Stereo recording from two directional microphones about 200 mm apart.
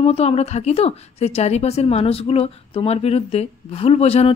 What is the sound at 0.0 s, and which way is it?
A woman's voice, 30° left (ahead or behind).